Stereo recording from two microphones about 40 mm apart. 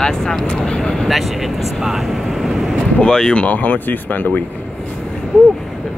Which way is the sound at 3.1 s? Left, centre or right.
Centre.